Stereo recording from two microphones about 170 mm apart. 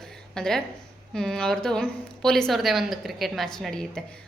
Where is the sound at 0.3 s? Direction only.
5° left (ahead or behind).